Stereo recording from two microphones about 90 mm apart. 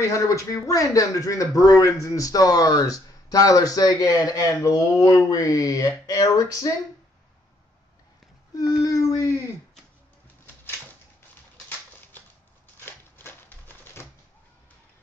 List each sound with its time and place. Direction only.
0.0 s speech: 35° left (ahead or behind)
8.5 s speech: 45° left (ahead or behind)
12.8 s typewriter: 25° left (ahead or behind)